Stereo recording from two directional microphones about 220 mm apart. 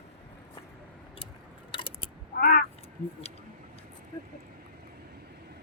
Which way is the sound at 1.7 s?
25° left (ahead or behind).